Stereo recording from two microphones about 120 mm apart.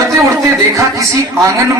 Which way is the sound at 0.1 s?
25° right (ahead or behind).